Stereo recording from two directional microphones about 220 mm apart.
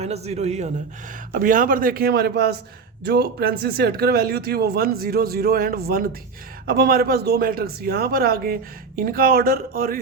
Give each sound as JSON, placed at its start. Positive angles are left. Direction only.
{"t": 0.0, "sound": "a man's voice", "side_deg": -30}